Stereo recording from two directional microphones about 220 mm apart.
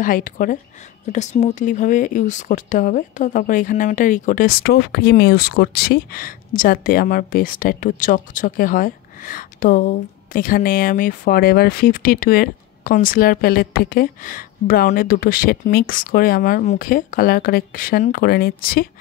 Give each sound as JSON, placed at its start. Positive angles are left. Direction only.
{"t": 0.0, "sound": "speech", "side_deg": 40}